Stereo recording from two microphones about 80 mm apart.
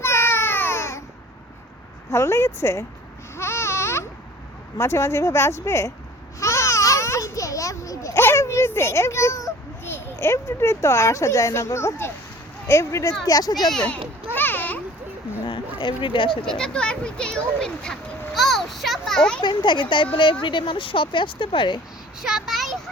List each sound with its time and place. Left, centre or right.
0.0 s a sound: left
2.0 s a child's voice: left
3.3 s baby cry: left
4.8 s a child's voice: left
6.4 s babbling: left
8.2 s a sound: left
9.8 s a child's voice: left
13.2 s speech: left
13.7 s speech: centre
14.3 s a sound: left
15.4 s a sound: left
16.5 s a child's voice: centre
19.4 s speech: left
22.2 s a child's voice: centre